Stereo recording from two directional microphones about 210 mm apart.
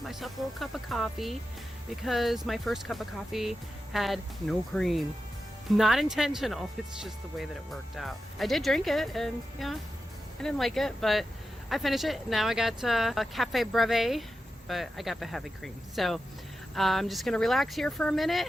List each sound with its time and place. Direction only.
0.0 s speech: centre (ahead or behind)